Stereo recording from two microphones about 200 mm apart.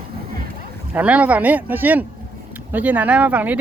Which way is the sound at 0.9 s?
5° right (ahead or behind).